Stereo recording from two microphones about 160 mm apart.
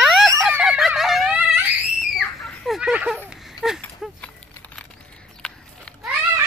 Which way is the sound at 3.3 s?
5° right (ahead or behind).